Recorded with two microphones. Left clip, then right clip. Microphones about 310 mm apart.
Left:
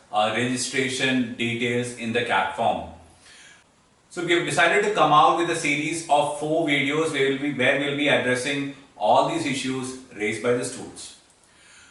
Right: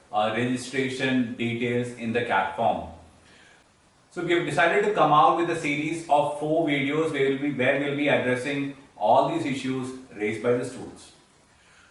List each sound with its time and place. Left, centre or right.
0.3 s a man's voice: centre
2.6 s a man's voice: right
4.2 s a man's voice: centre
6.1 s a man's voice: right
6.7 s a man's voice: centre
9.0 s a man's voice: right
9.2 s a man's voice: centre